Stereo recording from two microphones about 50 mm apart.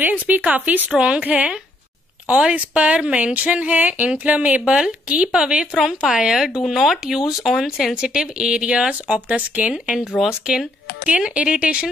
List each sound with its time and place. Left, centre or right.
0.0 s speech: right
0.9 s speech: right
6.3 s speech: centre
10.2 s speech: centre
11.1 s speech: right